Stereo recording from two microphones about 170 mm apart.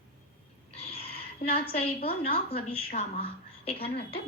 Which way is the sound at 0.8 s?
35° left (ahead or behind).